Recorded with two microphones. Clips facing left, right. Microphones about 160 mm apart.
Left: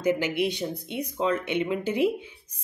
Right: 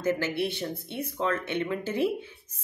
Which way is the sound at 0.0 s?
15° left (ahead or behind).